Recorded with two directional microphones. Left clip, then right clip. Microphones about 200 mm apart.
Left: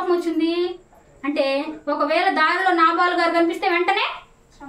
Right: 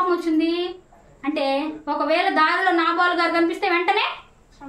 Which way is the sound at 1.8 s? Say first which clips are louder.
Left 2 dB; 5° right (ahead or behind).